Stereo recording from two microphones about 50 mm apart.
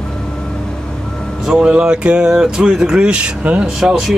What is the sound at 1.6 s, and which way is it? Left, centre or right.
Speech, centre.